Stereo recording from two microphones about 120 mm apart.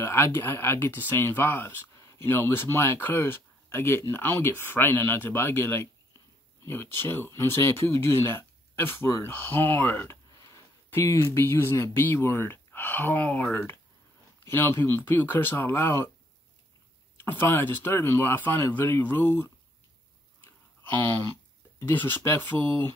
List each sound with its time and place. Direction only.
0.0 s speech: 20° left (ahead or behind)
10.4 s a sound: 25° left (ahead or behind)
11.3 s speech: 20° left (ahead or behind)
17.2 s speech: 20° left (ahead or behind)
21.7 s speech: 15° left (ahead or behind)